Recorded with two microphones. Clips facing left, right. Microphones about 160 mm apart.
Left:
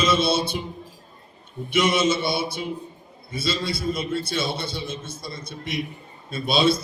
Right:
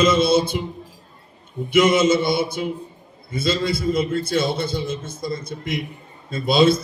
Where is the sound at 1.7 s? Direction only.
50° right (ahead or behind).